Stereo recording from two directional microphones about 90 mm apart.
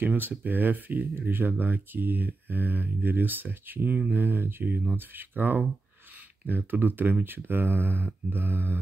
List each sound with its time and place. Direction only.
0.0 s speech: 20° right (ahead or behind)